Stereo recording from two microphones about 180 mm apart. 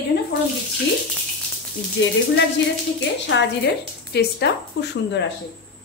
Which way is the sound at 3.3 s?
90° left.